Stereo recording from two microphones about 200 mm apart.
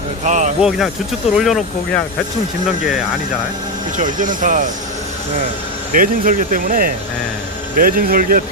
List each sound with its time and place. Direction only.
0.2 s speech: 40° right (ahead or behind)
0.6 s speech: centre (ahead or behind)
3.9 s speech: 40° right (ahead or behind)
5.9 s speech: 40° right (ahead or behind)